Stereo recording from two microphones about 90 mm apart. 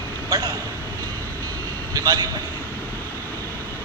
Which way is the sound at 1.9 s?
45° right (ahead or behind).